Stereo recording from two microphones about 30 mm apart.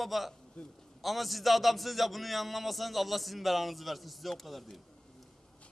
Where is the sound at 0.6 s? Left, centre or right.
Left.